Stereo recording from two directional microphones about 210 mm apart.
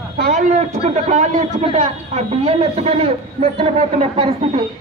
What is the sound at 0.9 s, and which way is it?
A man's voice, 35° right (ahead or behind).